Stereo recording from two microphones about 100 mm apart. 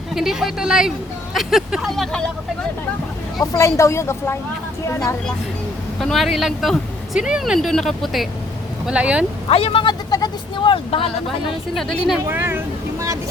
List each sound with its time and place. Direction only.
0.1 s speech: 5° right (ahead or behind)
3.5 s a woman's voice: 30° left (ahead or behind)
6.0 s speech: centre (ahead or behind)
8.9 s speech: 10° right (ahead or behind)
9.5 s speech: 80° left
9.8 s speech: 45° left (ahead or behind); by 11.1 s 60° left (ahead or behind)
11.7 s speech: 5° left (ahead or behind)
12.3 s speech: 25° right (ahead or behind)